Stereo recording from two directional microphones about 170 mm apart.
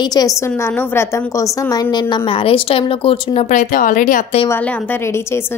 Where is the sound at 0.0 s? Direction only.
25° left (ahead or behind); by 4.4 s 50° left (ahead or behind).